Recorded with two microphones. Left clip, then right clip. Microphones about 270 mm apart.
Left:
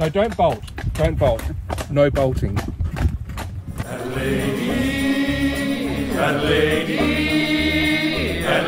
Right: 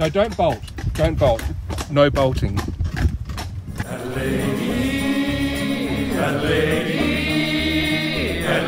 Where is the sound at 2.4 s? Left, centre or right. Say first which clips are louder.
Even; right.